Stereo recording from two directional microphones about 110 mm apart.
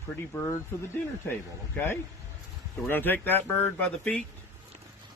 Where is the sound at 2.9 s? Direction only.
20° left (ahead or behind).